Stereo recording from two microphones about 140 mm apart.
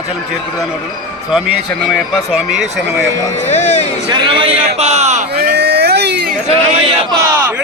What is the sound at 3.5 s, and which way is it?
Speech, 55° left (ahead or behind).